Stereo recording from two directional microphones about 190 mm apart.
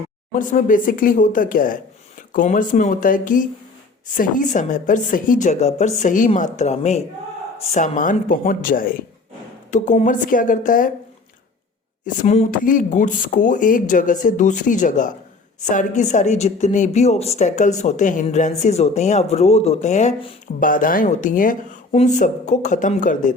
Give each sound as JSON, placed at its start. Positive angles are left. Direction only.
{"t": 0.3, "sound": "speech", "side_deg": 45}
{"t": 12.0, "sound": "speech", "side_deg": 35}